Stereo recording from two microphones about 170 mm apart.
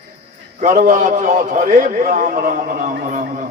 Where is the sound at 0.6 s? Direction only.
50° right (ahead or behind).